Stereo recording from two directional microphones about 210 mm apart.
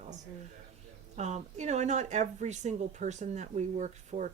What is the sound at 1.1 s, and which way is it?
Speech, 35° right (ahead or behind).